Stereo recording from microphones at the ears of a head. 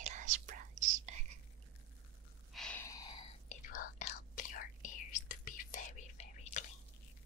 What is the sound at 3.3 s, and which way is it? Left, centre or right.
Whispering, left.